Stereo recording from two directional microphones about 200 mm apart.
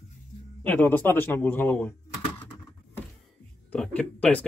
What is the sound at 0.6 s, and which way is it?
A man's voice, 10° left (ahead or behind).